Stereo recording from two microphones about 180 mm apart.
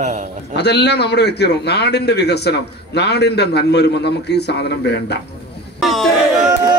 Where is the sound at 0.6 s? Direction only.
70° left (ahead or behind).